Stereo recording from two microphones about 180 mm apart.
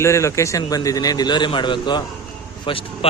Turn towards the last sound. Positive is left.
turn(degrees=30)  # may be behind; listen again after turning